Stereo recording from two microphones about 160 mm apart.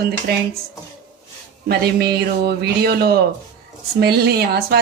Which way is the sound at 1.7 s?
85° right.